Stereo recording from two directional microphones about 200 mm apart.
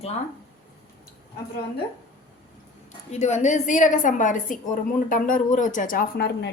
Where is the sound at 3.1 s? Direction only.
35° left (ahead or behind); by 6.5 s 55° left (ahead or behind).